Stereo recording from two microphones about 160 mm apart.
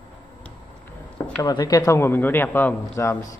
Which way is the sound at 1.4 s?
25° left (ahead or behind).